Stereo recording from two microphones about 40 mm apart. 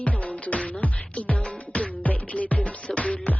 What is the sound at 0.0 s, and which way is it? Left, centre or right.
Music, left.